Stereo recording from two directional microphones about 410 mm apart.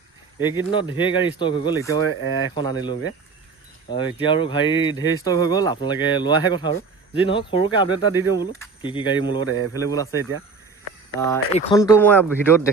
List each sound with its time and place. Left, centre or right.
0.3 s speech: centre
3.8 s speech: centre
11.3 s speech: centre